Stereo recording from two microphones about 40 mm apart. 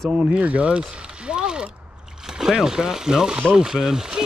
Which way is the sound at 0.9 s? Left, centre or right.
Right.